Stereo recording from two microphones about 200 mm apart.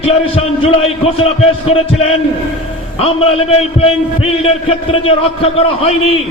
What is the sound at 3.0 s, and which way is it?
A man's voice, 30° left (ahead or behind).